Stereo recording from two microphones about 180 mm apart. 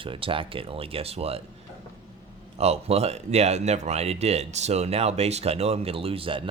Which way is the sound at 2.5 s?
35° right (ahead or behind).